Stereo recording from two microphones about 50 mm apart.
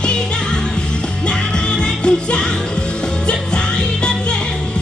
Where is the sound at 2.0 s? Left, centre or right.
Centre.